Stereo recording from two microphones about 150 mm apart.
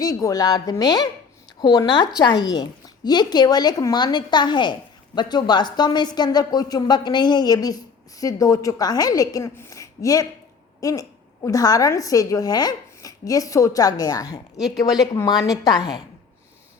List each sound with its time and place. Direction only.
0.0 s a woman's voice: 25° left (ahead or behind)